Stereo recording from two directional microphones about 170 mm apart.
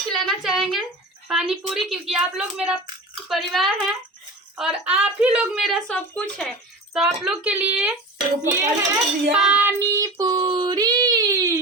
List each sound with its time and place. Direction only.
0.1 s a sound: centre (ahead or behind)
1.3 s a woman's voice: 5° right (ahead or behind)
9.3 s a child's voice: 5° right (ahead or behind)
9.9 s child singing: 20° right (ahead or behind)